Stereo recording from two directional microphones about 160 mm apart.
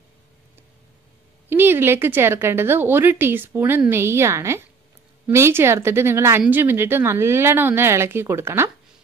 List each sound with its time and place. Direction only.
1.5 s speech: 15° right (ahead or behind)